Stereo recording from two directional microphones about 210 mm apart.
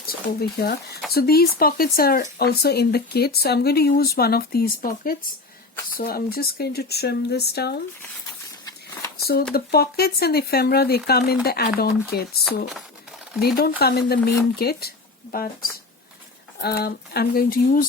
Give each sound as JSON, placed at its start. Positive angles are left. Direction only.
{"t": 0.1, "sound": "speech", "side_deg": 50}
{"t": 9.2, "sound": "speech", "side_deg": 45}
{"t": 16.6, "sound": "speech", "side_deg": 50}